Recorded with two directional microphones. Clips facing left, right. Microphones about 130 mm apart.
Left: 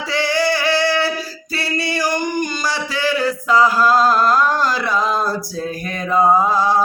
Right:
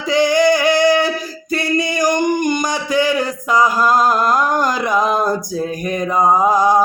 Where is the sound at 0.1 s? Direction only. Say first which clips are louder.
Right 6 dB; 15° right (ahead or behind).